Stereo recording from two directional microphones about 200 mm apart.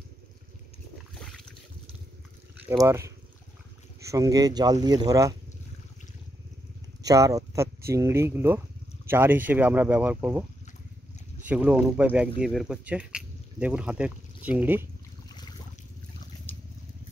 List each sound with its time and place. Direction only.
2.7 s speech: 15° right (ahead or behind)
7.0 s speech: 15° right (ahead or behind)
11.4 s speech: 5° right (ahead or behind)